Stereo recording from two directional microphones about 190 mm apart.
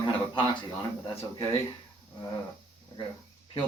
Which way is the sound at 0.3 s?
20° left (ahead or behind).